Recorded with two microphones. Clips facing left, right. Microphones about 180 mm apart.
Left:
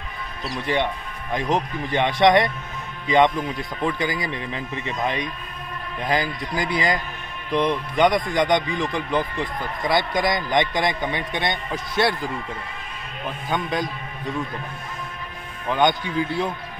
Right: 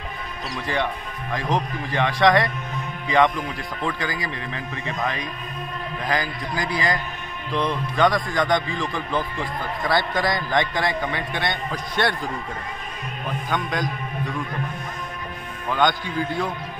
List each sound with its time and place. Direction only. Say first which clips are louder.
1.3 s speech: left 2 dB; 20° left (ahead or behind)
3.8 s speech: left 3 dB; 20° left (ahead or behind)
11.9 s a man's voice: left 2 dB; 5° left (ahead or behind)
13.5 s speech: left 2 dB; 25° left (ahead or behind)
15.7 s speech: left 2 dB; 20° left (ahead or behind)